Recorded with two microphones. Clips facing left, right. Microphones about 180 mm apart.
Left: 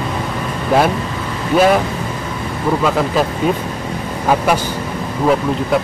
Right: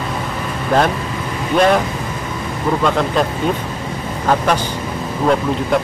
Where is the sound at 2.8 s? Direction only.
5° left (ahead or behind).